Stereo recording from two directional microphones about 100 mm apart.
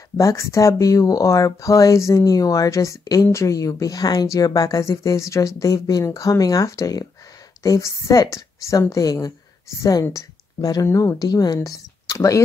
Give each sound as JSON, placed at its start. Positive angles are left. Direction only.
{"t": 0.2, "sound": "speech", "side_deg": 30}